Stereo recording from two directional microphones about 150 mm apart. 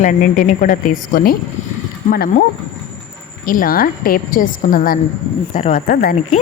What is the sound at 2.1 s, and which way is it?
Speech, 90° left.